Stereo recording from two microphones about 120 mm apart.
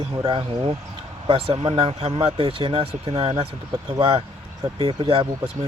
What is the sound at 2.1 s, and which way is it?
A man's voice, 45° right (ahead or behind).